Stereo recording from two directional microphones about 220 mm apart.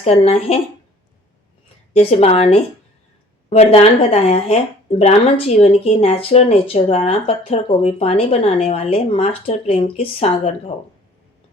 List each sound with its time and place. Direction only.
0.0 s speech: 25° left (ahead or behind)
1.9 s speech: 25° left (ahead or behind)